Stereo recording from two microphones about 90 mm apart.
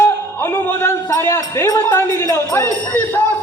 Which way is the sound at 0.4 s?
25° left (ahead or behind).